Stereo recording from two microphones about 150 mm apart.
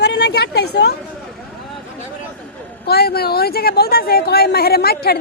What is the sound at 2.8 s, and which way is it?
A woman's voice, 90° left.